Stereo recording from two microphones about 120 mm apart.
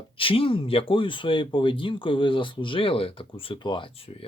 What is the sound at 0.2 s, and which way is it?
Speech, 50° left (ahead or behind).